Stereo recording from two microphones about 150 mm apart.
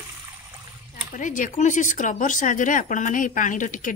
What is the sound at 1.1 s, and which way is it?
Speech, 60° left (ahead or behind).